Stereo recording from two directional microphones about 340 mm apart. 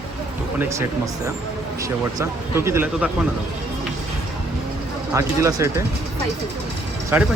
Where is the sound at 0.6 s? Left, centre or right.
Centre.